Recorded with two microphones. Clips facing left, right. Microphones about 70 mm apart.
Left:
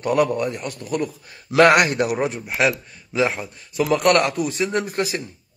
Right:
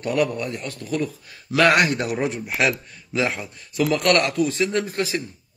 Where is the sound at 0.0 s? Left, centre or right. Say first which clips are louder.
Left 3 dB; left.